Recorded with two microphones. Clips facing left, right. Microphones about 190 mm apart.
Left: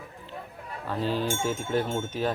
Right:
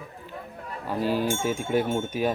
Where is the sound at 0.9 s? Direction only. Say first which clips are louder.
Right 3 dB; 10° right (ahead or behind).